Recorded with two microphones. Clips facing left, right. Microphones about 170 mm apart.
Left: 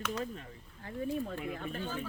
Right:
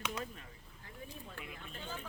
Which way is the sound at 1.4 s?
55° left (ahead or behind).